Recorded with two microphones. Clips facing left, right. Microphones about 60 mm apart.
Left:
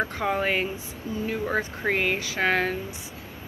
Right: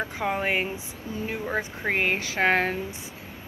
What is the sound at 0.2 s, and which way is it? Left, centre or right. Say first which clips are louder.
Speech: right 1 dB; centre.